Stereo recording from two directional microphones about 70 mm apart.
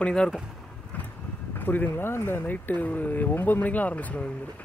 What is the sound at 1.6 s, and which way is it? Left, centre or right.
Speech, left.